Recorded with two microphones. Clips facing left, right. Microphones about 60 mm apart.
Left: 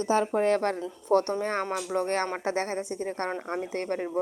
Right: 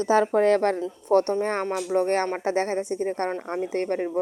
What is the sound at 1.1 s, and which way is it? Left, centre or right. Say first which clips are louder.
Speech: right 3 dB; right.